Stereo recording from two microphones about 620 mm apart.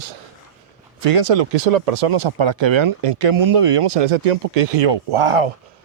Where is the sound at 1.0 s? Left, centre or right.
Right.